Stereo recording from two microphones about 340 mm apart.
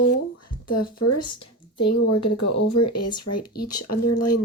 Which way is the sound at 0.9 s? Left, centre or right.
Left.